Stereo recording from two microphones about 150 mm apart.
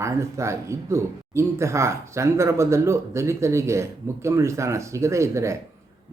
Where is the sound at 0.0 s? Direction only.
20° right (ahead or behind).